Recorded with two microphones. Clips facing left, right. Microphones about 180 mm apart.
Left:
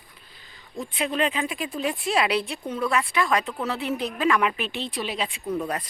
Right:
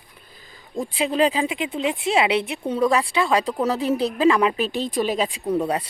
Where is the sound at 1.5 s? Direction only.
20° right (ahead or behind).